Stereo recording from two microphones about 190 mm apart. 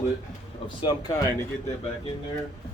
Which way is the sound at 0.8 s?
20° left (ahead or behind).